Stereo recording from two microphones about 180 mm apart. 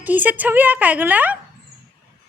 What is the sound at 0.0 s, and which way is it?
A woman's voice, 10° right (ahead or behind).